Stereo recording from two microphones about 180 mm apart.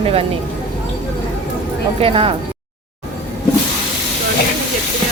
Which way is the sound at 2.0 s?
30° right (ahead or behind).